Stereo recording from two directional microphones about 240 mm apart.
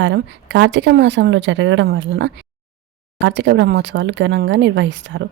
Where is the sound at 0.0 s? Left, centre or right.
Right.